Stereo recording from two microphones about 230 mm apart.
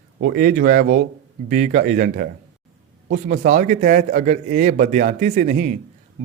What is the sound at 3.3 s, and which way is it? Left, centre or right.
A man's voice, right.